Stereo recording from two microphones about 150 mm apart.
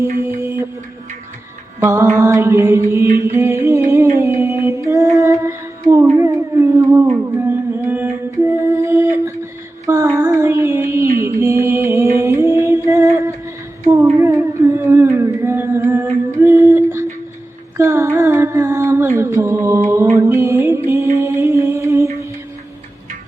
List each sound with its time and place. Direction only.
0.0 s music: 15° right (ahead or behind)
1.8 s mantra: 15° right (ahead or behind)
3.2 s music: 20° right (ahead or behind)
5.1 s humming: 20° right (ahead or behind)
6.1 s howl: 20° right (ahead or behind)
7.3 s music: 15° right (ahead or behind)
14.2 s humming: 20° right (ahead or behind)
16.4 s a sound: 15° right (ahead or behind)
17.7 s music: 15° right (ahead or behind)
21.2 s humming: 15° right (ahead or behind)